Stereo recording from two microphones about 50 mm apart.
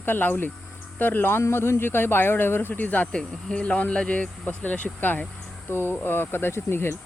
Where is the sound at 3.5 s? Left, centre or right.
Left.